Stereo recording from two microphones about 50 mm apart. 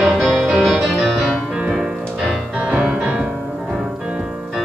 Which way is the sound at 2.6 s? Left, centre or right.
Right.